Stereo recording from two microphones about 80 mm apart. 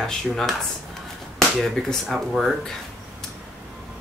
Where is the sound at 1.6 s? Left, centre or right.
Centre.